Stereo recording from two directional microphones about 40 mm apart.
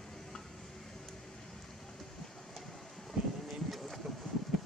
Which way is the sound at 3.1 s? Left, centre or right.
Centre.